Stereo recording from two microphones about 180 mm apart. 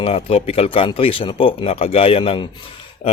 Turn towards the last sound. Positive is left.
turn(degrees=35)  # may be behind; listen again after turning